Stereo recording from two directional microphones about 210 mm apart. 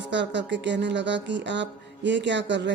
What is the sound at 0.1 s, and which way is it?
Speech, 55° right (ahead or behind).